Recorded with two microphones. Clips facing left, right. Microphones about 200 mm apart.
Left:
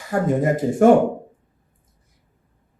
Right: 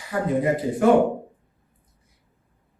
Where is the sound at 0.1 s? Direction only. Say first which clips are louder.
Left 3 dB; 45° left (ahead or behind).